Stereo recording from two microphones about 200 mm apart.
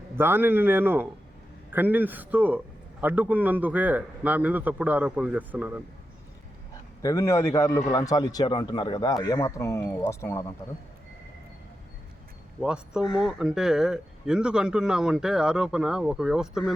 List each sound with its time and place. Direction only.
0.2 s a man's voice: 10° right (ahead or behind)
7.0 s a man's voice: 15° left (ahead or behind)
12.5 s speech: 5° right (ahead or behind)